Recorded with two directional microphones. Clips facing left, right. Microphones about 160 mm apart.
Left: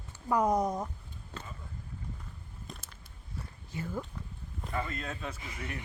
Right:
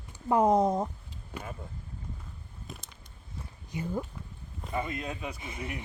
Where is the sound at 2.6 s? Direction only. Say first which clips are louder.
Right 2 dB; 5° right (ahead or behind).